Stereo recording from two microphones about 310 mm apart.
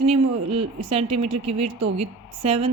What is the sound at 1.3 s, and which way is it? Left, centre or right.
Speech, right.